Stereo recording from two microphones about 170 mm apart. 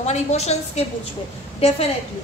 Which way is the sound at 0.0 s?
40° left (ahead or behind).